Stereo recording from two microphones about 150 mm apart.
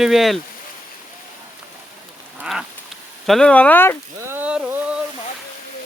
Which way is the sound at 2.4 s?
5° right (ahead or behind).